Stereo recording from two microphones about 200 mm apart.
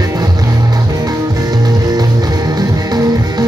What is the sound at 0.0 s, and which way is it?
Music, 20° right (ahead or behind).